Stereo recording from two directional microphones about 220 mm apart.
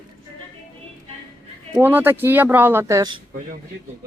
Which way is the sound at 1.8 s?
10° right (ahead or behind).